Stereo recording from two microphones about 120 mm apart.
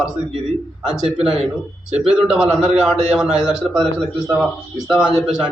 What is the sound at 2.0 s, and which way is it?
A man's voice, 10° right (ahead or behind).